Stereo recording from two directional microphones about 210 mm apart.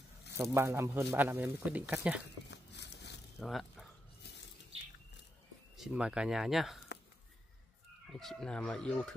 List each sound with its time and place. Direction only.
0.4 s speech: 10° right (ahead or behind)
2.5 s a sound: 55° left (ahead or behind)
3.3 s speech: centre (ahead or behind)
5.8 s speech: 5° right (ahead or behind)
8.1 s speech: centre (ahead or behind)